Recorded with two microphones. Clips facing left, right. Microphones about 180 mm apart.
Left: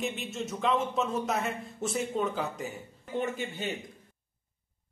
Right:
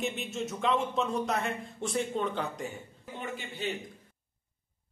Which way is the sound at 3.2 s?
45° left (ahead or behind).